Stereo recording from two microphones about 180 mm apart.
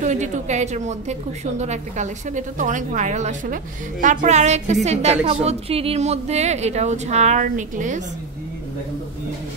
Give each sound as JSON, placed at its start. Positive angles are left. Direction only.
{"t": 0.0, "sound": "a woman's voice", "side_deg": -40}